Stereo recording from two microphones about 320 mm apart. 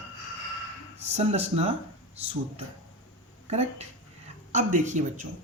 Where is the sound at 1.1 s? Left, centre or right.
Centre.